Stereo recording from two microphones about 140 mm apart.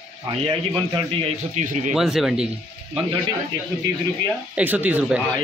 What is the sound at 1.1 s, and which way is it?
Speech, 45° right (ahead or behind).